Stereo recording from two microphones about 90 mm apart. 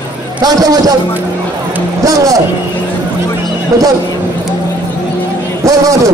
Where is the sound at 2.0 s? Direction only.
40° right (ahead or behind).